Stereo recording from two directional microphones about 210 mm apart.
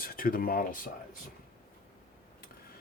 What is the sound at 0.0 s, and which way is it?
Speech, 45° left (ahead or behind).